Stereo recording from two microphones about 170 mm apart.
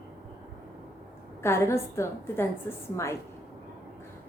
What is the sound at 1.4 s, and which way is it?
A woman's voice, 15° left (ahead or behind).